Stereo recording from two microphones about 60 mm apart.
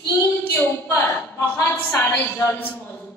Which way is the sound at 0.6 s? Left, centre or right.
Left.